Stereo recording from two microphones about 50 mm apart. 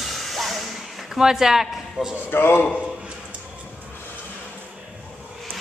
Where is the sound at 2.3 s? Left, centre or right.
Left.